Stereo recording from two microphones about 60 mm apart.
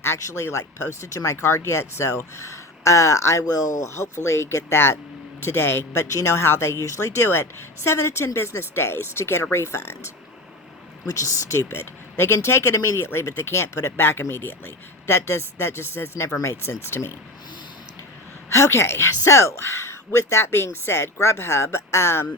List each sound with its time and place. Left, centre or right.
0.0 s speech: left
3.9 s speech: left
11.0 s speech: left
11.7 s speech: left
18.4 s speech: left